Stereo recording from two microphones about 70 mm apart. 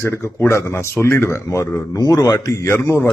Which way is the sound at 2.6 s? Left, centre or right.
Left.